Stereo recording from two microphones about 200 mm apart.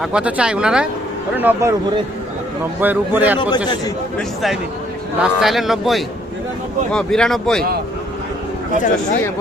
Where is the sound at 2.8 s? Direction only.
10° right (ahead or behind).